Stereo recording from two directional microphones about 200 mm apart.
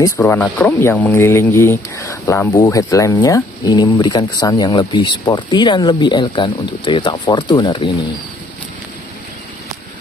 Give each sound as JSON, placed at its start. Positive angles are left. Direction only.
{"t": 0.0, "sound": "speech", "side_deg": 10}